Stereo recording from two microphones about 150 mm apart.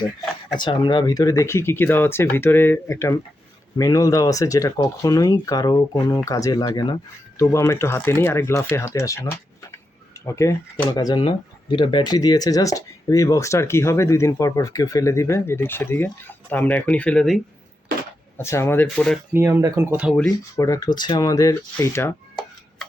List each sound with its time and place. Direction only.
0.5 s speech: 30° left (ahead or behind)
10.9 s speech: 30° left (ahead or behind); by 17.4 s 5° left (ahead or behind)
18.3 s speech: 15° left (ahead or behind)
19.3 s speech: 20° right (ahead or behind)
20.6 s speech: 25° left (ahead or behind)